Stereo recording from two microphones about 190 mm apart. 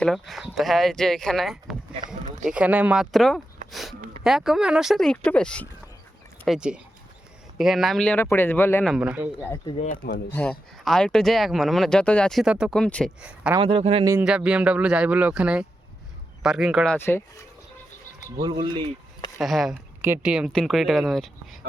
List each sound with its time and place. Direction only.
0.0 s a man's voice: centre (ahead or behind)
9.0 s speech: 5° right (ahead or behind)
9.6 s speech: 40° left (ahead or behind)
10.3 s speech: 5° left (ahead or behind)
13.2 s speech: 5° right (ahead or behind)
13.6 s speech: 30° right (ahead or behind)
14.0 s speech: 15° right (ahead or behind); by 17.2 s 10° left (ahead or behind)
18.3 s speech: 25° right (ahead or behind)
19.4 s speech: centre (ahead or behind)